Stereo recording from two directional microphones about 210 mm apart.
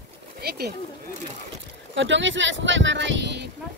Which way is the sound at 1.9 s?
60° right (ahead or behind).